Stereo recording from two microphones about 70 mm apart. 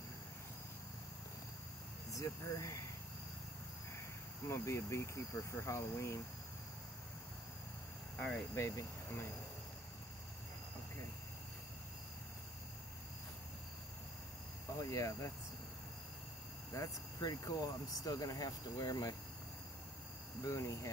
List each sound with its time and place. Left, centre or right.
2.0 s speech: left
4.5 s speech: left
8.5 s speech: left
14.8 s speech: left
16.7 s speech: left
20.4 s speech: left